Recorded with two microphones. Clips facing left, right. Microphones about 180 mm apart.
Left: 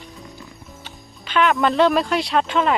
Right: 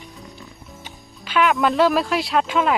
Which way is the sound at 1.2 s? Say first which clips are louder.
Even; 5° right (ahead or behind).